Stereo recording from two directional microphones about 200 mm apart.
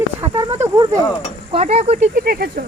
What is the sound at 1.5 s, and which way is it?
Speech, 30° right (ahead or behind).